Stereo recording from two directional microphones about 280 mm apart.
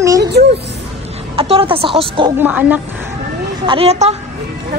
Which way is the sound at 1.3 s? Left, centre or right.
Centre.